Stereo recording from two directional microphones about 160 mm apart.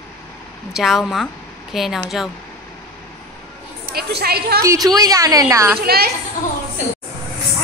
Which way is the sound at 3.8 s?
75° right (ahead or behind).